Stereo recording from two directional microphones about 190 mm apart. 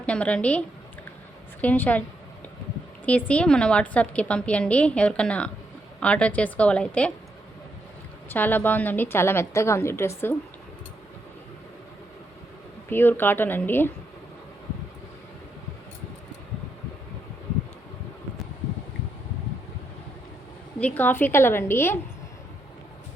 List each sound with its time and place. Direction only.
0.0 s a woman's voice: 5° left (ahead or behind)
1.6 s a woman's voice: 10° left (ahead or behind)
3.1 s a woman's voice: 5° left (ahead or behind)
8.3 s a woman's voice: 10° left (ahead or behind)
12.9 s a woman's voice: 10° left (ahead or behind)
20.7 s a woman's voice: 10° left (ahead or behind)